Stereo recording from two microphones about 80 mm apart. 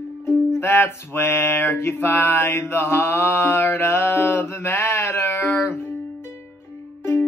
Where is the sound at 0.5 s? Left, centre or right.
Left.